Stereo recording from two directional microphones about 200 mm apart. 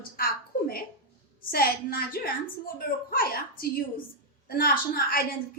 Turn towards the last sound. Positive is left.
turn(degrees=45)  # may be behind; listen again after turning